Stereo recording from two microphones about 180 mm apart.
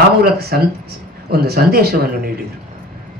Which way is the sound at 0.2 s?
60° right (ahead or behind).